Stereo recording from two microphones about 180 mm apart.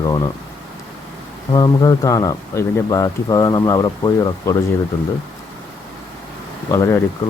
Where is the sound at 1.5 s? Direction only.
20° left (ahead or behind).